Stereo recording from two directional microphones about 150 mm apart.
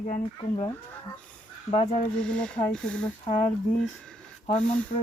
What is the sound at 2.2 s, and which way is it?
Speech, 5° left (ahead or behind).